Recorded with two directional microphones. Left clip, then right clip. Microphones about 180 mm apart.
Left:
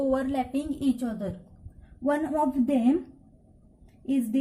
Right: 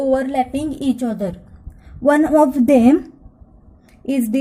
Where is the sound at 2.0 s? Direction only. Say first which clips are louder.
Right 13 dB; 45° right (ahead or behind).